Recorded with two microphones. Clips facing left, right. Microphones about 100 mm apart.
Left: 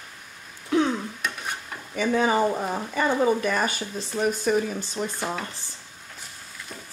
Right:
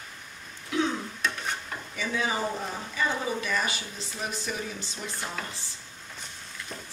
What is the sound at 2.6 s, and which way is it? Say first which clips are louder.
Speech: left 6 dB; 50° left (ahead or behind).